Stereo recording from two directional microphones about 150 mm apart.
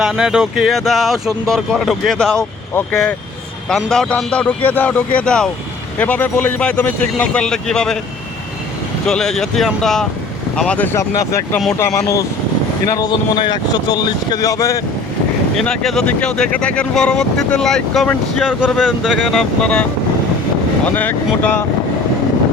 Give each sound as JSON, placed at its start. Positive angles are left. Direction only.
{"t": 0.0, "sound": "speech", "side_deg": -5}
{"t": 3.7, "sound": "speech", "side_deg": 5}
{"t": 9.0, "sound": "speech", "side_deg": 5}
{"t": 15.5, "sound": "speech", "side_deg": 5}
{"t": 20.8, "sound": "speech", "side_deg": 10}